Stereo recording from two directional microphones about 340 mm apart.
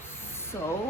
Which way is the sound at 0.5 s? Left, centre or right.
Centre.